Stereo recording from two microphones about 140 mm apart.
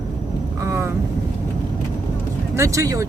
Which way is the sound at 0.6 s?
20° right (ahead or behind).